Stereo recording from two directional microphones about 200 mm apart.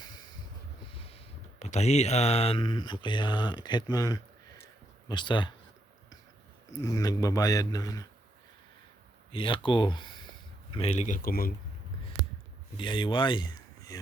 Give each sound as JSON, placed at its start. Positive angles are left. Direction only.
{"t": 0.0, "sound": "snort", "side_deg": 20}
{"t": 0.9, "sound": "a man's voice", "side_deg": 30}
{"t": 6.8, "sound": "a man's voice", "side_deg": 20}
{"t": 9.3, "sound": "a man's voice", "side_deg": 25}
{"t": 12.7, "sound": "speech", "side_deg": 25}